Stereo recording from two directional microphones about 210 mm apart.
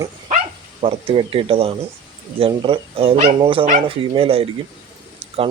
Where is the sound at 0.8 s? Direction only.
25° right (ahead or behind).